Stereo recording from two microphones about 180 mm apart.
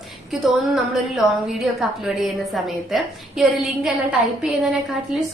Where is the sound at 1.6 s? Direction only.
Centre (ahead or behind).